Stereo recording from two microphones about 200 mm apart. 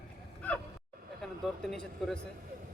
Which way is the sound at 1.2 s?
Centre (ahead or behind).